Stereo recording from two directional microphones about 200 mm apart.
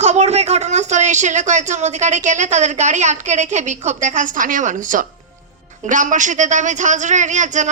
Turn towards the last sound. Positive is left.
turn(degrees=-35)  # may be behind; listen again after turning